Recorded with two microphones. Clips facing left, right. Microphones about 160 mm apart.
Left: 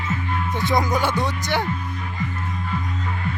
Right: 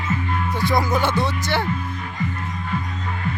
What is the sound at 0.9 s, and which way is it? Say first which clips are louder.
Speech: right 1 dB; 15° left (ahead or behind).